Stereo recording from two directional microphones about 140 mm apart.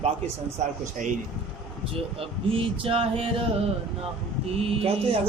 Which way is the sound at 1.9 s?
40° right (ahead or behind).